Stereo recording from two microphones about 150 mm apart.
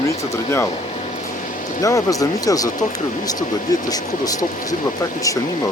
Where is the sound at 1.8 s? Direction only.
20° left (ahead or behind).